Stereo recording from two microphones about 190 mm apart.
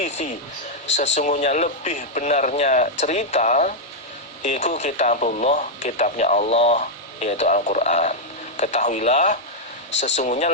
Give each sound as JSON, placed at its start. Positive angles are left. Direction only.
{"t": 0.0, "sound": "speech", "side_deg": 35}